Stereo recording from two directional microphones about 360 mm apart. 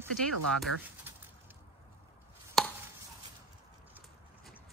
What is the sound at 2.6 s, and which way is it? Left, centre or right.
Chopping, centre.